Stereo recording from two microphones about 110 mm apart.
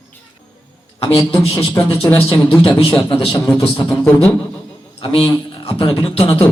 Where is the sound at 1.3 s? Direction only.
25° left (ahead or behind).